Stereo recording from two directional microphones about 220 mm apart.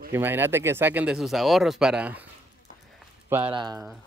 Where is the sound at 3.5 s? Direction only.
20° right (ahead or behind).